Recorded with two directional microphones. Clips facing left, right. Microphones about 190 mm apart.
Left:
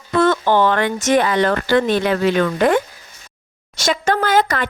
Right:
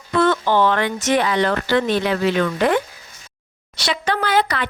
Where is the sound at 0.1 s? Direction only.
45° left (ahead or behind).